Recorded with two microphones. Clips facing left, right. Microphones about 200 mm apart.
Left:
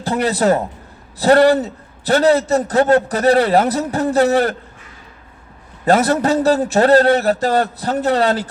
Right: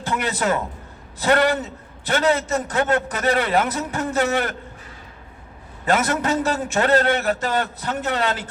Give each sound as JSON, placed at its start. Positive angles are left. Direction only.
{"t": 0.0, "sound": "a man's voice", "side_deg": 35}
{"t": 5.8, "sound": "a man's voice", "side_deg": 35}